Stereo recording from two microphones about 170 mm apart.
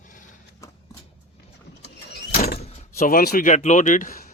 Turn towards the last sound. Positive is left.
turn(degrees=55)  # may be behind; listen again after turning